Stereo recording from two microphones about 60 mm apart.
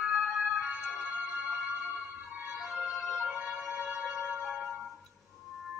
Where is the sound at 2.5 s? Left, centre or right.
Centre.